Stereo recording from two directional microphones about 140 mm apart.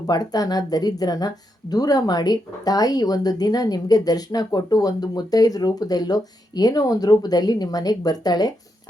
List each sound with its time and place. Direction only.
0.1 s speech: 25° left (ahead or behind)